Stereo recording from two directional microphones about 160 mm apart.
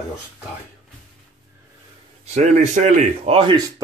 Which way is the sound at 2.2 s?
45° right (ahead or behind).